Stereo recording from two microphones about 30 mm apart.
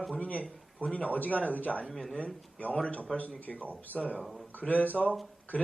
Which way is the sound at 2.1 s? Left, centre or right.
Left.